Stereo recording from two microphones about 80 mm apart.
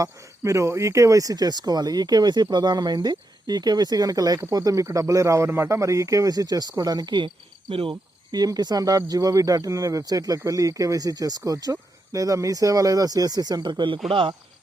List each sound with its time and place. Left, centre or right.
0.0 s speech: right
8.3 s speech: right
14.1 s speech: right